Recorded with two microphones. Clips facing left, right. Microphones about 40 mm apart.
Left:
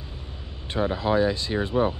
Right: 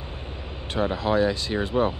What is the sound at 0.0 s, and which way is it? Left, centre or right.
Vehicle, right.